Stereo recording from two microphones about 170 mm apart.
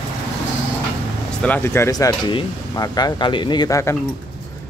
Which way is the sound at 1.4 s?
10° left (ahead or behind).